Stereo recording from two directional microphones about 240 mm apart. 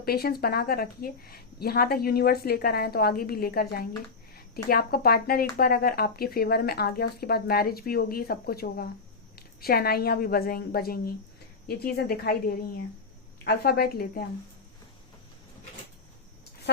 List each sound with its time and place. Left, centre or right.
0.0 s speech: left